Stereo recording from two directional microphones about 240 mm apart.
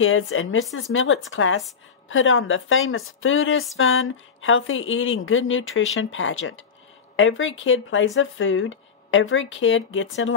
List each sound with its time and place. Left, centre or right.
0.0 s speech: left